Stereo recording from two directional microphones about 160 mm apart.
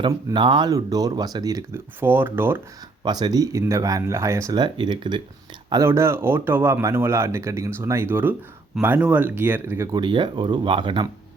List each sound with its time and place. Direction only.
0.1 s speech: 20° right (ahead or behind)
3.0 s speech: 25° right (ahead or behind)
5.7 s speech: 15° right (ahead or behind)
10.0 s speech: 30° right (ahead or behind)